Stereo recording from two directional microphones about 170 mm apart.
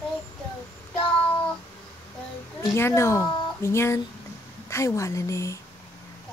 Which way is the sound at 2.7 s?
15° left (ahead or behind).